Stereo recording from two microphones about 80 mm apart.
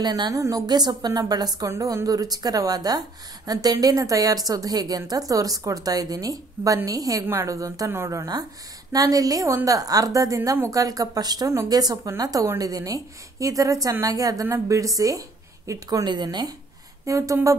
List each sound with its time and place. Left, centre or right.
0.0 s speech: right
0.3 s speech: right
8.9 s speech: right
17.0 s speech: right